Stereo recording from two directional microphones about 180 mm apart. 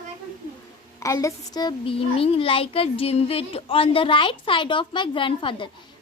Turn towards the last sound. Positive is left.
turn(degrees=30)  # may be behind; listen again after turning